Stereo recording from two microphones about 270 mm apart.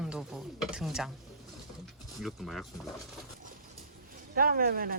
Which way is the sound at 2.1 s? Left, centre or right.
Centre.